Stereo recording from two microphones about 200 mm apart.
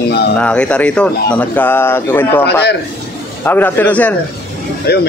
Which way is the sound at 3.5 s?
10° left (ahead or behind).